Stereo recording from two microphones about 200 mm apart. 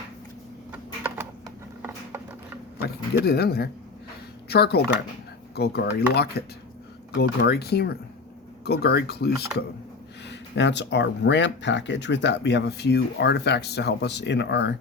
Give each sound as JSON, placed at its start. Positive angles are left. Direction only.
{"t": 0.7, "sound": "typing", "side_deg": -10}
{"t": 1.8, "sound": "a sound", "side_deg": -10}
{"t": 2.8, "sound": "speech", "side_deg": 50}